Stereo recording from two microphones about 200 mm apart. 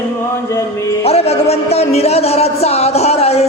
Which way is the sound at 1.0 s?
30° left (ahead or behind).